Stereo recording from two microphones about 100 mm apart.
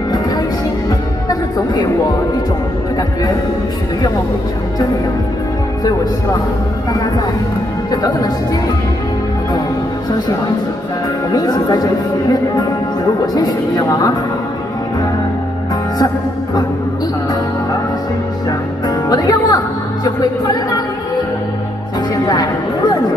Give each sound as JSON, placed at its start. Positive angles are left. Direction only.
{"t": 0.8, "sound": "music", "side_deg": 40}
{"t": 7.9, "sound": "speech", "side_deg": 40}
{"t": 11.3, "sound": "speech", "side_deg": 40}
{"t": 18.9, "sound": "music", "side_deg": 40}
{"t": 20.2, "sound": "speech", "side_deg": 40}
{"t": 22.1, "sound": "music", "side_deg": 40}